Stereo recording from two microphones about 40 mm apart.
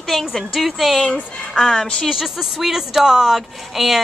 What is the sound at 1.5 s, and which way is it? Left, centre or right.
Speech, centre.